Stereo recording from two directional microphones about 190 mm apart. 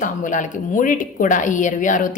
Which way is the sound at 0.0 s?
40° left (ahead or behind).